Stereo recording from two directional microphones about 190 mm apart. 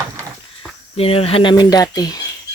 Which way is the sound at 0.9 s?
30° left (ahead or behind).